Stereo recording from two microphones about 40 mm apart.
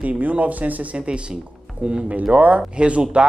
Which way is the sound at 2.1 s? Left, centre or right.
Right.